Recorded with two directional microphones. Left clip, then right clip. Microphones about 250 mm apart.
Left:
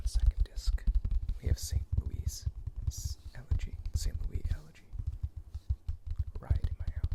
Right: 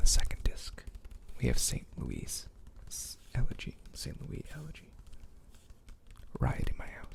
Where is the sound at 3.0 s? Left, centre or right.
Right.